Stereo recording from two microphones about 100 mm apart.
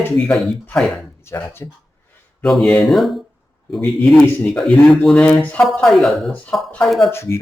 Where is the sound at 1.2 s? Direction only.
25° left (ahead or behind).